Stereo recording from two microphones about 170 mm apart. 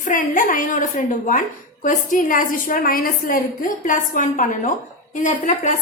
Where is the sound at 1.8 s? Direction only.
50° left (ahead or behind).